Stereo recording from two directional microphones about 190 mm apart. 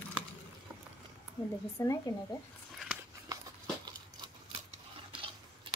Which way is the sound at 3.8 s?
20° right (ahead or behind).